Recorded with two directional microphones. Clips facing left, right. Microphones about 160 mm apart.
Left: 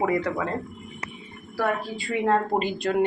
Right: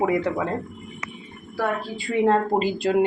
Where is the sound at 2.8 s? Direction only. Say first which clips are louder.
Right 3 dB; 30° right (ahead or behind).